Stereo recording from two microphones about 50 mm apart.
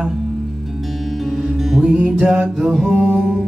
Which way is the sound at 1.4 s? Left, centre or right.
Centre.